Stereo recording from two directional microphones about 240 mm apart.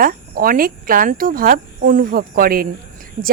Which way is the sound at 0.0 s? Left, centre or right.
Right.